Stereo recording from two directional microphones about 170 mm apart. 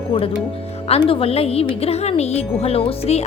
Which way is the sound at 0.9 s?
35° left (ahead or behind).